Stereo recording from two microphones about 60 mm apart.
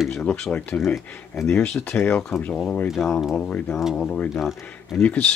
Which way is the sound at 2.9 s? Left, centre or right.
Centre.